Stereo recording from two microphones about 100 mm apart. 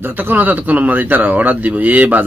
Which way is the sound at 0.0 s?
20° right (ahead or behind).